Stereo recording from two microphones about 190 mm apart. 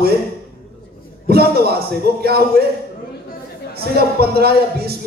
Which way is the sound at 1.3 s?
55° right (ahead or behind).